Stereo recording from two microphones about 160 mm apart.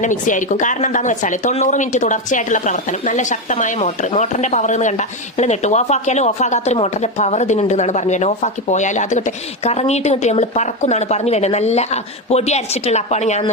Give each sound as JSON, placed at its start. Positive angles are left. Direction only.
{"t": 0.0, "sound": "speech", "side_deg": 50}